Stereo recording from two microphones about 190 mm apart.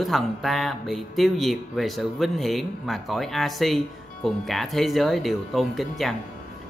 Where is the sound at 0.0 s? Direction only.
Centre (ahead or behind).